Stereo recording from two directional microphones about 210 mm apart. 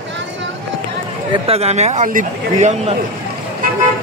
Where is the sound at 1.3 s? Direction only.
30° right (ahead or behind).